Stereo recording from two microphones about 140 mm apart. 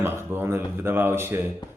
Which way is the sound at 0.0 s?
15° right (ahead or behind).